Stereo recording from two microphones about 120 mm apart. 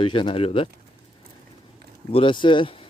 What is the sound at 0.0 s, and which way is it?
Speech, 45° left (ahead or behind).